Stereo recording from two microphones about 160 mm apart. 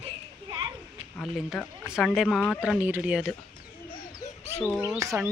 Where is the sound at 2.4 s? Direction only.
10° left (ahead or behind).